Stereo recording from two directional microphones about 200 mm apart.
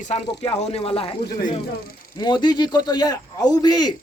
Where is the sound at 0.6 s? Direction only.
30° left (ahead or behind).